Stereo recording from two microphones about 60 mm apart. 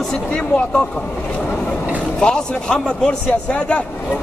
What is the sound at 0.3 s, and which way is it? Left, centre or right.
Speech, centre.